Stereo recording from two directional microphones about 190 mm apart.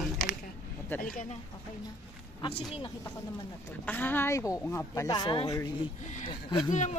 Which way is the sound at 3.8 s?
10° left (ahead or behind).